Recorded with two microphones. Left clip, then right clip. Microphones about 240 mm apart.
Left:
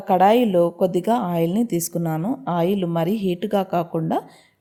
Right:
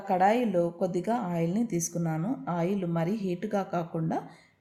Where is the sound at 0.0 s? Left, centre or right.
Left.